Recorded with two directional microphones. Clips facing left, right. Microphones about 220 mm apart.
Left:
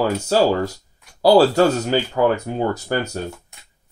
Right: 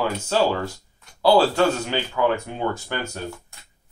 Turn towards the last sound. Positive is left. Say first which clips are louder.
# left 6 dB
turn(degrees=40)  # may be behind; listen again after turning